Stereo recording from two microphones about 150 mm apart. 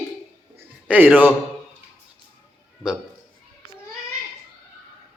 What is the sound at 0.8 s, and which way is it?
Speech, 10° right (ahead or behind).